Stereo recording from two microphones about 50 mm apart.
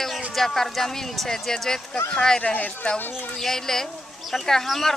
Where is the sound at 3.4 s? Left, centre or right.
Centre.